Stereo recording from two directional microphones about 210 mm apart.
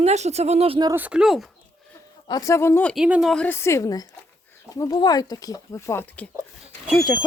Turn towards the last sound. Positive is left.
turn(degrees=0)  # may be behind; listen again after turning